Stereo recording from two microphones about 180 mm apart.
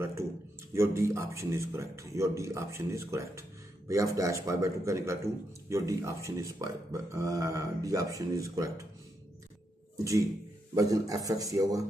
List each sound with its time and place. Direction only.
0.0 s a sound: 15° right (ahead or behind)
0.7 s speech: 15° right (ahead or behind)
10.7 s a man's voice: 20° right (ahead or behind)